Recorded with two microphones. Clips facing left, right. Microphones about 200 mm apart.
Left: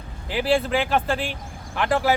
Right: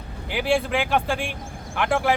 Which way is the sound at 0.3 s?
Centre (ahead or behind).